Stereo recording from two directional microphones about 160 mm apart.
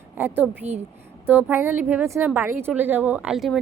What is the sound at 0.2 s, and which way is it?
A woman's voice, 15° right (ahead or behind).